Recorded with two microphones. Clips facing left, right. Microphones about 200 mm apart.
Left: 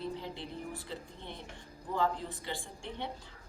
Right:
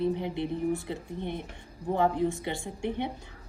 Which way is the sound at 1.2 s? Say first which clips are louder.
Right 11 dB; 55° right (ahead or behind).